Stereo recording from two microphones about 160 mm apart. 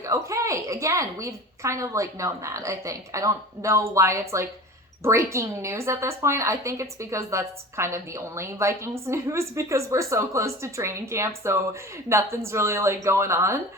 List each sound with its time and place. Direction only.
0.0 s a woman's voice: 20° right (ahead or behind)